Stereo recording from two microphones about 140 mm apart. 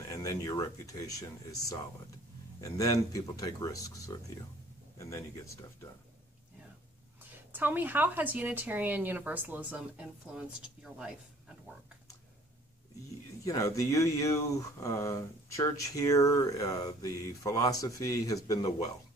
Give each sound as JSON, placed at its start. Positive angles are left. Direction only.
{"t": 0.1, "sound": "speech", "side_deg": 25}
{"t": 2.6, "sound": "speech", "side_deg": 25}
{"t": 7.5, "sound": "speech", "side_deg": -15}
{"t": 13.5, "sound": "speech", "side_deg": 25}